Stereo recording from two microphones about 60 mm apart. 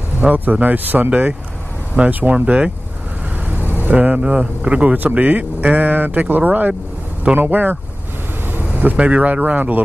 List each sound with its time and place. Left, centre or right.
0.3 s speech: right
3.4 s vehicle: right
3.9 s speech: right